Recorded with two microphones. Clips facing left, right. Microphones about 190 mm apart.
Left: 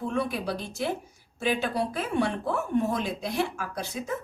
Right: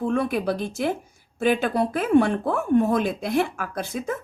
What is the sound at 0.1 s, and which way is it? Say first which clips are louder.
A woman's voice: right 5 dB; 50° right (ahead or behind).